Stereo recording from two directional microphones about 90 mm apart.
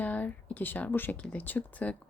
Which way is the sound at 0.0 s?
15° left (ahead or behind).